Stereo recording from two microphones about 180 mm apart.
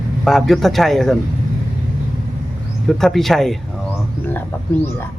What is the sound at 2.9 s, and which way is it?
Speech, centre (ahead or behind).